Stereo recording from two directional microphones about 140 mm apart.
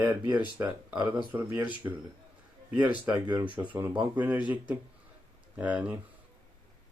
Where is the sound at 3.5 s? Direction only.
10° right (ahead or behind).